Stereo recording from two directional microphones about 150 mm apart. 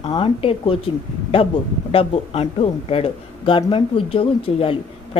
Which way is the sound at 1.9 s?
40° left (ahead or behind).